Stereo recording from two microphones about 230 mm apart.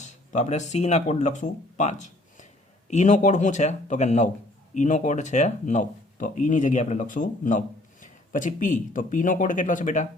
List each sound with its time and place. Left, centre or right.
0.0 s speech: left